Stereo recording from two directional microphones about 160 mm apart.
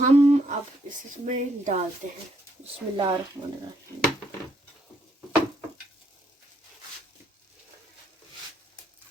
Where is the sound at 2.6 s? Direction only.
30° right (ahead or behind).